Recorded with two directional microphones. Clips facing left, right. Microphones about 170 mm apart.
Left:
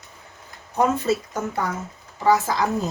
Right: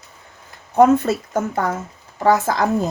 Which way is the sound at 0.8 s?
55° right (ahead or behind).